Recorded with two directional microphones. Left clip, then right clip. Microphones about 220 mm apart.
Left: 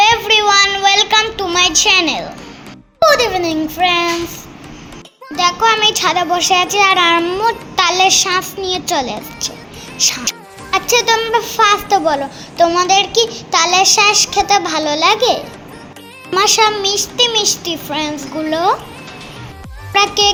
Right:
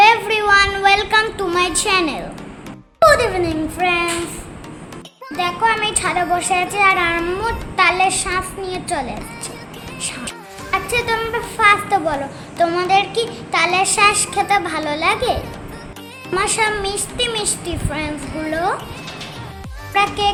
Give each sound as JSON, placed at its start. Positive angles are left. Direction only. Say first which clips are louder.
{"t": 0.0, "sound": "a sound", "louder": "left 2 dB", "side_deg": 10}
{"t": 3.0, "sound": "a child's voice", "louder": "left 1 dB", "side_deg": 15}
{"t": 5.4, "sound": "a child's voice", "louder": "left 5 dB", "side_deg": 25}
{"t": 10.0, "sound": "a child's voice", "louder": "left 12 dB", "side_deg": 15}
{"t": 10.7, "sound": "a child's voice", "louder": "left 6 dB", "side_deg": 25}
{"t": 19.9, "sound": "a child's voice", "louder": "left 4 dB", "side_deg": 30}